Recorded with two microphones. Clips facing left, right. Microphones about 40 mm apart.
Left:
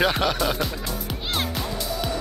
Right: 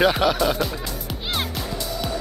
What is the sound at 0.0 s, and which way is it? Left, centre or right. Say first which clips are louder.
Music: right 3 dB; centre.